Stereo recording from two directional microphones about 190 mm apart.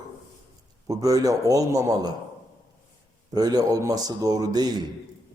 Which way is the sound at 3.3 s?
20° right (ahead or behind).